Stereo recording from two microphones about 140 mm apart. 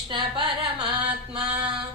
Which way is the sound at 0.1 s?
35° right (ahead or behind).